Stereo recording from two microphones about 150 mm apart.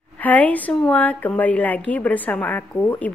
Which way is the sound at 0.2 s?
10° left (ahead or behind).